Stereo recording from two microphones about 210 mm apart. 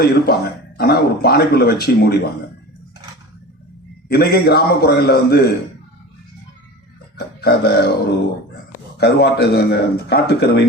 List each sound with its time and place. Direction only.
0.0 s speech: 50° left (ahead or behind)
4.1 s speech: 50° left (ahead or behind)
7.4 s speech: 50° left (ahead or behind)